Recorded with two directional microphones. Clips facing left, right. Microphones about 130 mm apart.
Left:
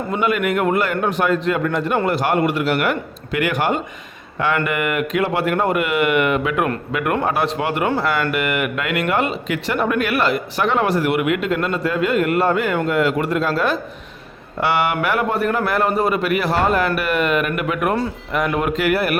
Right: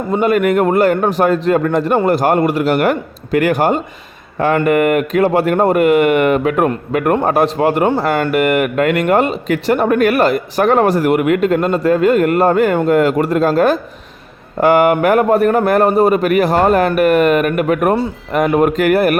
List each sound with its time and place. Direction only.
0.1 s a man's voice: 40° right (ahead or behind)